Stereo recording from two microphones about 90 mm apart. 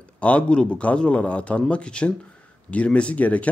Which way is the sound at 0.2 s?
15° left (ahead or behind).